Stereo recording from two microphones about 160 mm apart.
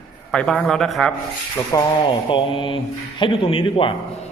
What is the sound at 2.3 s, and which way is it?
Speech, 35° left (ahead or behind).